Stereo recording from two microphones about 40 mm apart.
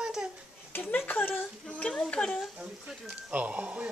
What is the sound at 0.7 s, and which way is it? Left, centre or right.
Speech, left.